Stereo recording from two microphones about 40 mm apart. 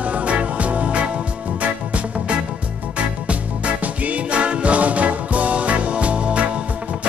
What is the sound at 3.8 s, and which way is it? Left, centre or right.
Music, right.